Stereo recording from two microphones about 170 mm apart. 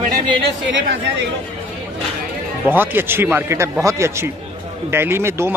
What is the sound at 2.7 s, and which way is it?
A man's voice, 10° right (ahead or behind).